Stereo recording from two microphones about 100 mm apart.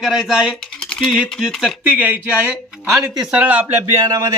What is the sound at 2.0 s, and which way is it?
Speech, 15° right (ahead or behind).